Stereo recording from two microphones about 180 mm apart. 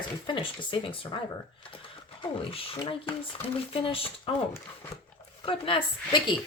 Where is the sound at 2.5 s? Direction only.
30° left (ahead or behind).